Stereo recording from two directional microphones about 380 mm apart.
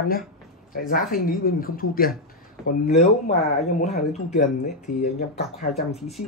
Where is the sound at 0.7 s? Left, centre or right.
Left.